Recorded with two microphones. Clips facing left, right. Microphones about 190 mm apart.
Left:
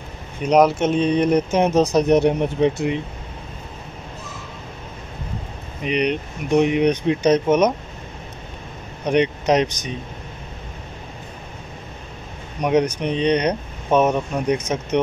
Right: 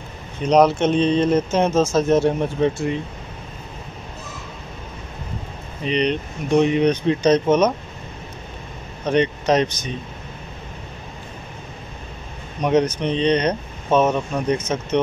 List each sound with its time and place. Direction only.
0.4 s speech: 10° left (ahead or behind)
5.8 s speech: 10° left (ahead or behind)
9.0 s speech: 15° left (ahead or behind)
12.6 s speech: 10° left (ahead or behind)